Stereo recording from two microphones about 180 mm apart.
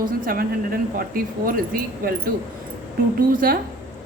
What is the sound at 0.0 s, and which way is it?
A woman's voice, 55° right (ahead or behind).